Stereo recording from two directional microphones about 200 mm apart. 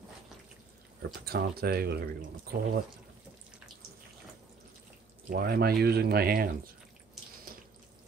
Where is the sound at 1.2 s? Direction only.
50° right (ahead or behind).